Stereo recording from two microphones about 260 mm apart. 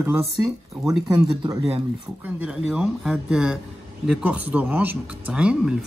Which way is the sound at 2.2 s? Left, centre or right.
Centre.